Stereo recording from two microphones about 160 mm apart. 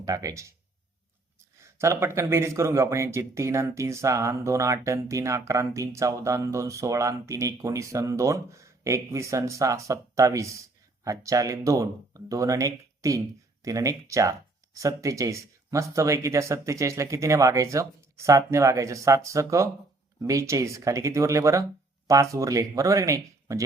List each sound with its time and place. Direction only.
0.0 s speech: 20° right (ahead or behind)
1.6 s speech: 15° right (ahead or behind)